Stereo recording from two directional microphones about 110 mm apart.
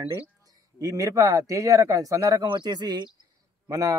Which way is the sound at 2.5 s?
40° right (ahead or behind).